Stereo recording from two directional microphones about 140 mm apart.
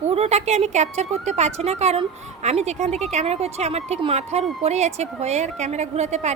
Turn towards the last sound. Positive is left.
turn(degrees=-55)  # may be behind; listen again after turning